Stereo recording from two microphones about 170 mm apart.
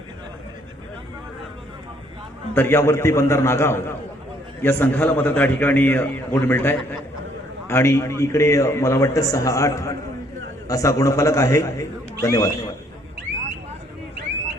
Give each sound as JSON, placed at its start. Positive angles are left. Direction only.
{"t": 2.6, "sound": "a man's voice", "side_deg": 15}